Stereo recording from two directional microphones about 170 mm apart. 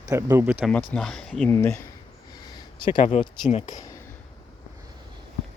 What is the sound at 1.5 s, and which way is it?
Speech, 15° left (ahead or behind).